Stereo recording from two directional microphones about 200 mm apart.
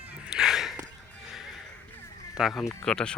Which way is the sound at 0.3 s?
5° right (ahead or behind).